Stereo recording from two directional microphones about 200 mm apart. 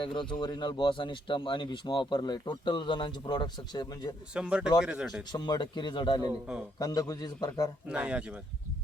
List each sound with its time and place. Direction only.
0.0 s speech: 25° left (ahead or behind)
4.4 s speech: 5° right (ahead or behind)
5.3 s speech: 20° left (ahead or behind)
7.9 s speech: 5° right (ahead or behind)